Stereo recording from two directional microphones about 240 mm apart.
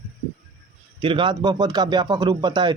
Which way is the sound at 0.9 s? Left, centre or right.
Right.